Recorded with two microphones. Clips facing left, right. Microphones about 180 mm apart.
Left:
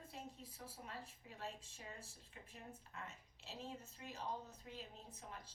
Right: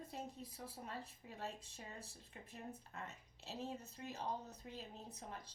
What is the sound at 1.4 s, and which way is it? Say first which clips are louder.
Speech: right 2 dB; 40° right (ahead or behind).